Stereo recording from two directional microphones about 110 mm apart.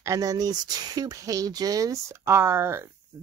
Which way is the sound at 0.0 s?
30° right (ahead or behind).